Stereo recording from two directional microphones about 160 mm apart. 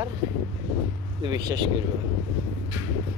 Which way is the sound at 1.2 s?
25° right (ahead or behind).